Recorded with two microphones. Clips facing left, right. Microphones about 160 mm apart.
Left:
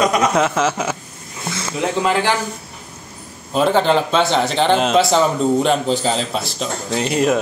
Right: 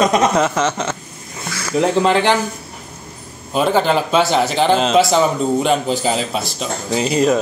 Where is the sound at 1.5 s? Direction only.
25° left (ahead or behind).